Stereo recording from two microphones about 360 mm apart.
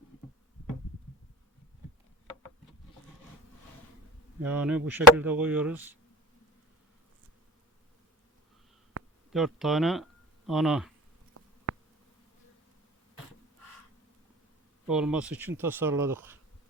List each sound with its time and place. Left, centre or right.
4.4 s speech: centre
9.3 s speech: centre
11.7 s a sound: right
14.8 s speech: centre